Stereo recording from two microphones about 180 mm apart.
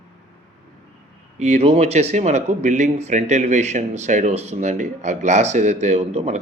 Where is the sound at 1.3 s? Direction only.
40° right (ahead or behind).